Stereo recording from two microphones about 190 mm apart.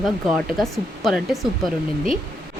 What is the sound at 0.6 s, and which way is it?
Speech, centre (ahead or behind).